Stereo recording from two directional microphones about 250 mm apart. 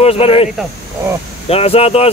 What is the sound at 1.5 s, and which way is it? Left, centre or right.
Speech, left.